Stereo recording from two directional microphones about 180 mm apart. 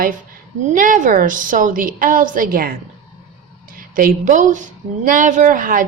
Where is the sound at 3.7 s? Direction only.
50° right (ahead or behind).